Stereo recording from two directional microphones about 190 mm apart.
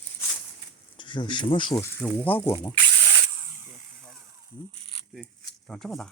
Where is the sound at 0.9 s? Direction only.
25° left (ahead or behind).